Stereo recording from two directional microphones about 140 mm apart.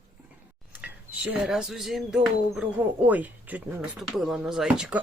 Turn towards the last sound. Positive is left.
turn(degrees=-5)  # may be behind; listen again after turning